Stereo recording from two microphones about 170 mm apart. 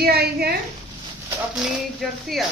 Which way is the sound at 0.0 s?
70° right (ahead or behind).